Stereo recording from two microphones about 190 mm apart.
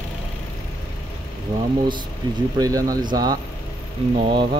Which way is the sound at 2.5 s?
20° right (ahead or behind).